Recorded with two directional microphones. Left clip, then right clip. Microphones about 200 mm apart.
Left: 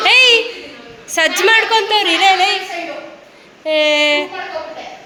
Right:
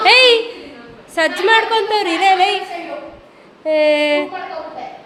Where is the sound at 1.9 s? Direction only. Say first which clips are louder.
Left 2 dB; 20° right (ahead or behind).